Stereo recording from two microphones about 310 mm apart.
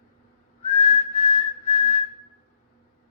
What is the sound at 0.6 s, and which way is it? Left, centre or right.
Whistling, left.